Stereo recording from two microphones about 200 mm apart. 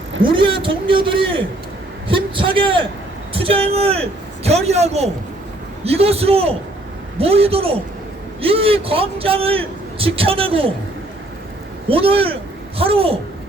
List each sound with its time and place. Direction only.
0.2 s a man's voice: 25° right (ahead or behind)
11.9 s a man's voice: 30° right (ahead or behind)